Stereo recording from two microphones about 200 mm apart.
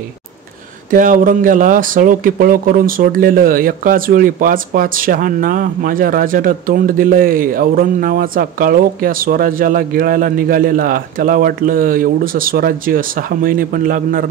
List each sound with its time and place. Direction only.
0.8 s speech: 40° right (ahead or behind)